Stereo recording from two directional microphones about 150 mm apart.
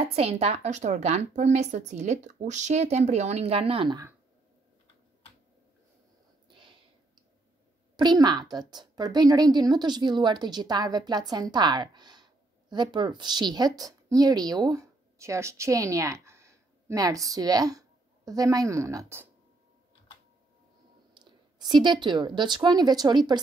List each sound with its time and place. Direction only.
0.0 s a woman's voice: 40° right (ahead or behind)
6.5 s a sound: 35° right (ahead or behind)
7.9 s a woman's voice: 30° right (ahead or behind)
21.1 s a woman's voice: 30° right (ahead or behind)